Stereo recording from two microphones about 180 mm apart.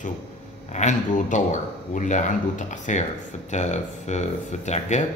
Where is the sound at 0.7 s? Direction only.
40° left (ahead or behind).